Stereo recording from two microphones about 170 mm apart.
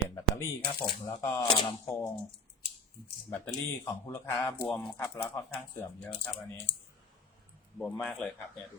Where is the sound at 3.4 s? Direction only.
15° left (ahead or behind).